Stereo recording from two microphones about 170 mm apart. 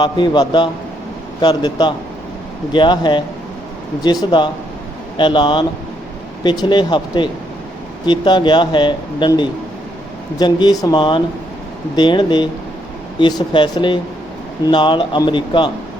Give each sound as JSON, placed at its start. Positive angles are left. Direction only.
{"t": 0.0, "sound": "speech", "side_deg": 25}